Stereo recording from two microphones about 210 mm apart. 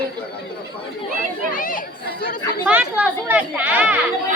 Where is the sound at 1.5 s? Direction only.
40° left (ahead or behind).